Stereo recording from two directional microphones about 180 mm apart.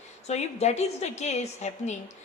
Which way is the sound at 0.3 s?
40° left (ahead or behind).